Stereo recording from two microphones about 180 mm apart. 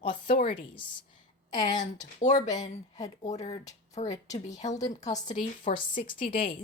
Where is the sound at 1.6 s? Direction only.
45° left (ahead or behind).